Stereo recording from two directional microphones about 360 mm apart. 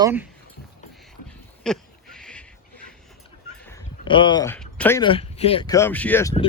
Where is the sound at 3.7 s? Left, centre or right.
Centre.